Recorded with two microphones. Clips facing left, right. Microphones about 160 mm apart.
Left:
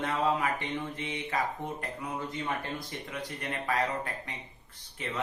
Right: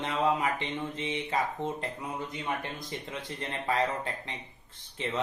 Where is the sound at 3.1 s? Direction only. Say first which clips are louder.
Left 2 dB; 25° right (ahead or behind).